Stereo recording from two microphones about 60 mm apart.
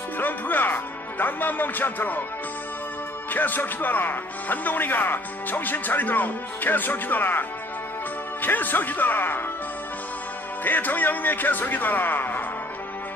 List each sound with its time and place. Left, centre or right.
0.2 s speech: left
3.3 s speech: left
10.6 s speech: left